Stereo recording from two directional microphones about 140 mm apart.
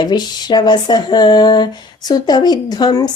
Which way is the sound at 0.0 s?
30° left (ahead or behind).